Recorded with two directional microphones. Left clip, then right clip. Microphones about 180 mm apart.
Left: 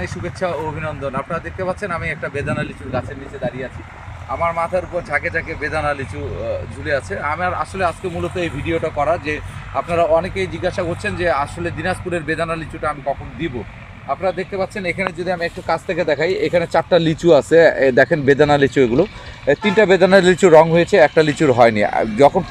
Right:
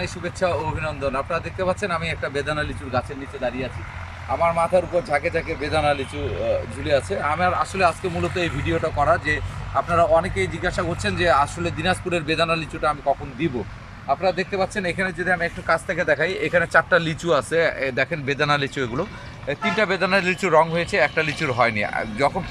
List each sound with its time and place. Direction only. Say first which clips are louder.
0.0 s speech: left 2 dB; 15° right (ahead or behind)
0.8 s speech: left 1 dB; centre (ahead or behind)
4.3 s speech: even; 5° right (ahead or behind); by 22.3 s 35° left (ahead or behind)